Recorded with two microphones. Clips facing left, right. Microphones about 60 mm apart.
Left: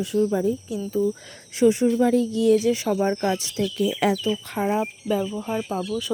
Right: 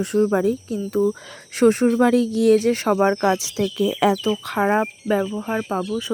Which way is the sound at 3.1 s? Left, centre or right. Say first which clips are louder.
Right 4 dB; right.